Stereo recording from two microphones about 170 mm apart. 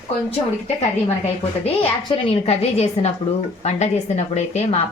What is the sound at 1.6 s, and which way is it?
Speech, 35° left (ahead or behind).